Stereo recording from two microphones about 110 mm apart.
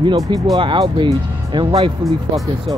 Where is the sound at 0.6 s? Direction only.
45° right (ahead or behind).